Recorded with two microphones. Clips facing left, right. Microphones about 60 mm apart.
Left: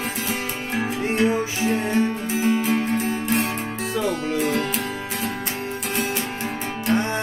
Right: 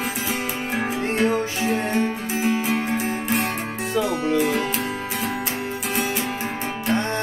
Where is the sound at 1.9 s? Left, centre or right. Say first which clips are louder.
Left 1 dB; centre.